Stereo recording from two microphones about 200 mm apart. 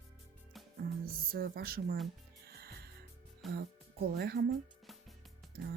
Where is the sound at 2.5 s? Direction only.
50° right (ahead or behind).